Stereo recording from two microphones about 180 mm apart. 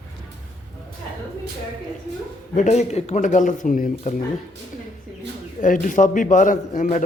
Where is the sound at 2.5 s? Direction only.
40° left (ahead or behind).